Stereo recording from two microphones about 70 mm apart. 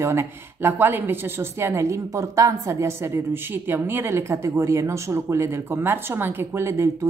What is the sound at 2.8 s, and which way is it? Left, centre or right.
Speech, right.